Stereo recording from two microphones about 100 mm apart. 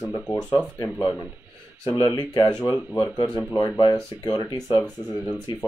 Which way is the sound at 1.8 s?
50° left (ahead or behind).